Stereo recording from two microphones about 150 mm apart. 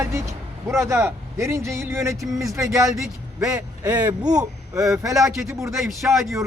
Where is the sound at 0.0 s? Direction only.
20° right (ahead or behind).